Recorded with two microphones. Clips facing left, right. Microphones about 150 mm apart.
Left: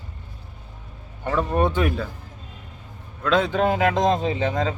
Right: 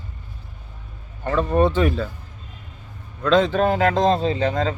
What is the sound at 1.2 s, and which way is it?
Speech, 15° left (ahead or behind).